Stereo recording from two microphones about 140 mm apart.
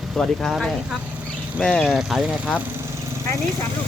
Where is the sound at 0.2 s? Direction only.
Centre (ahead or behind).